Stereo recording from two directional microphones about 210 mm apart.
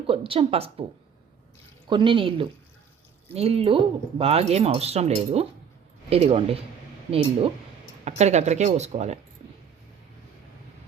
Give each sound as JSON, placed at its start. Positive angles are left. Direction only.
{"t": 0.1, "sound": "speech", "side_deg": -25}
{"t": 1.9, "sound": "speech", "side_deg": -25}